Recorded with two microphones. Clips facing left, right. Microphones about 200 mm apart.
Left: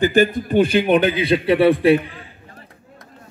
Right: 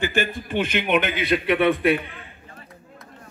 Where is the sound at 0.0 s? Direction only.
40° left (ahead or behind).